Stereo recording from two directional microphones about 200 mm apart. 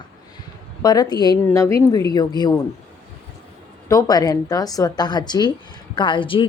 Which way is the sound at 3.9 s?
20° left (ahead or behind).